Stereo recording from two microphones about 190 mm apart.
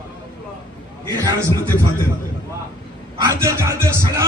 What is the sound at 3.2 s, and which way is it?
Speech, 15° right (ahead or behind).